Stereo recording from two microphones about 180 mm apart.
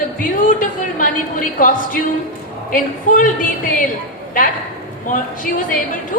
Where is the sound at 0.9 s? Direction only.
50° left (ahead or behind).